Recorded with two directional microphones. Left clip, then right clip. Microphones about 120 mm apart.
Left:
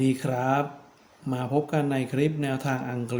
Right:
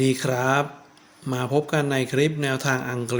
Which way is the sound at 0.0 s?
30° right (ahead or behind).